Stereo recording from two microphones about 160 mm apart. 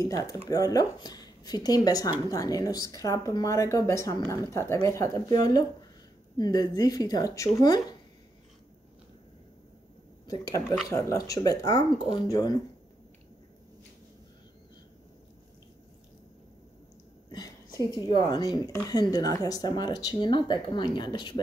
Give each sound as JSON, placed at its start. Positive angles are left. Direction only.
{"t": 0.0, "sound": "a woman's voice", "side_deg": 20}
{"t": 10.9, "sound": "a woman's voice", "side_deg": 20}
{"t": 17.3, "sound": "a woman's voice", "side_deg": 25}